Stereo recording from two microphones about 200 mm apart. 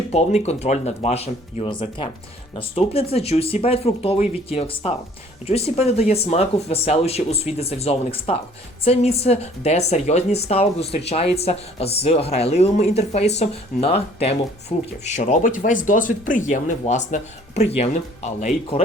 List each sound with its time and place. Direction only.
0.1 s speech: 30° left (ahead or behind)